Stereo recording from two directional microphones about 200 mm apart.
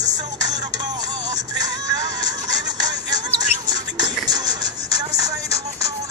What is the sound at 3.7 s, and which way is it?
Music, 20° right (ahead or behind).